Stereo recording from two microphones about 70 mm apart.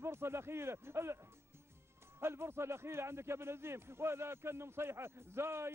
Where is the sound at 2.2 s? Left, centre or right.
Right.